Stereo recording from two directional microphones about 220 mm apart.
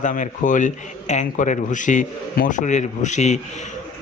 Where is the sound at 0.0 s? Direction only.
35° left (ahead or behind).